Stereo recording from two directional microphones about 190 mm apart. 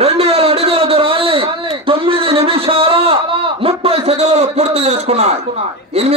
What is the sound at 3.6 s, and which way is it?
A man's voice, 30° right (ahead or behind).